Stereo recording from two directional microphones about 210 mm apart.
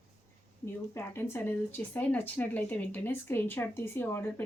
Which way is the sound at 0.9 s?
10° left (ahead or behind).